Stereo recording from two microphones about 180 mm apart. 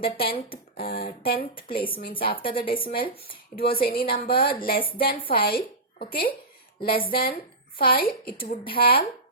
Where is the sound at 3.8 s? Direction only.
55° left (ahead or behind).